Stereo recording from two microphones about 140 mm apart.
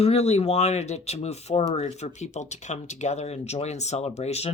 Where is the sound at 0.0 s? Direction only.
50° left (ahead or behind).